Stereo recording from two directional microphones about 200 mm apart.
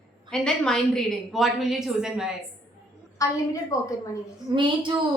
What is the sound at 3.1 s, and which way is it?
Speech, 15° left (ahead or behind).